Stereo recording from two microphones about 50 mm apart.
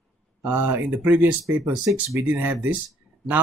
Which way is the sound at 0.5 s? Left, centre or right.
Right.